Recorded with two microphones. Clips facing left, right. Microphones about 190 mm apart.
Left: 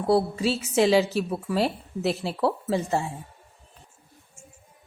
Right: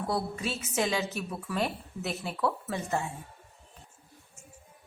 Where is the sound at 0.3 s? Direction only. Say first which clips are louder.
Left 9 dB; 30° left (ahead or behind).